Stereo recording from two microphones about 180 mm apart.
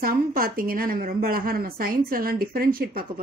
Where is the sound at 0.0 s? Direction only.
55° right (ahead or behind).